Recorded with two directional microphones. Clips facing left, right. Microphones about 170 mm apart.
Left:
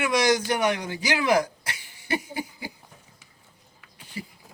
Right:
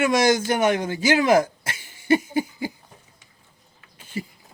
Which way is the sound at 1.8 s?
25° right (ahead or behind).